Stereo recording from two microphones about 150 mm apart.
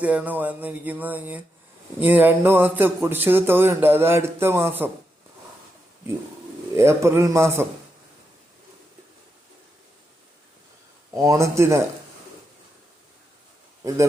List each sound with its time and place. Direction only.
0.0 s speech: 10° right (ahead or behind)
6.7 s speech: 20° right (ahead or behind)
11.1 s speech: 20° right (ahead or behind)
13.8 s speech: 20° right (ahead or behind)